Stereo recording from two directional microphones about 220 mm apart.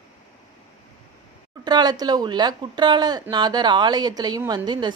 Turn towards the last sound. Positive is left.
turn(degrees=-20)  # may be behind; listen again after turning